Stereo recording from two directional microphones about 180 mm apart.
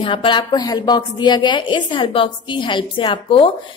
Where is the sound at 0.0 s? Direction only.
30° left (ahead or behind).